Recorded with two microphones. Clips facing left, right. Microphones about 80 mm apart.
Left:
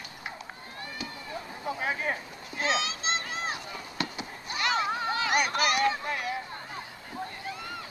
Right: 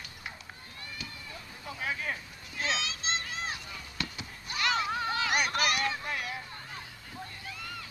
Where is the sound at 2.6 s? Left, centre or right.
Centre.